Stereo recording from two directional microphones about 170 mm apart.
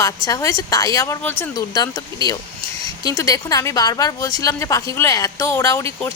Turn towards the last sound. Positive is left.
turn(degrees=15)  # may be behind; listen again after turning